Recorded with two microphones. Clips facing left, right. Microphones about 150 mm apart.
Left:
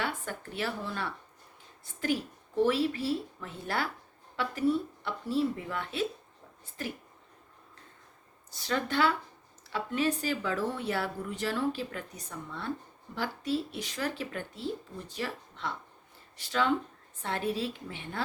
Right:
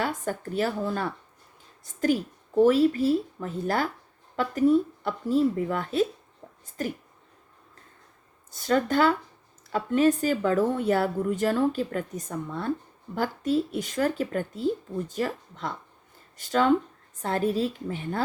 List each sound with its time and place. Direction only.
0.0 s speech: 40° right (ahead or behind)
8.4 s speech: 50° right (ahead or behind)